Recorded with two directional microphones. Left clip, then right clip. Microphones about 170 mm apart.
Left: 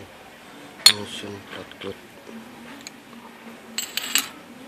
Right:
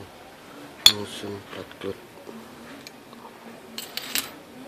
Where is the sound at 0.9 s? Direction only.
5° right (ahead or behind).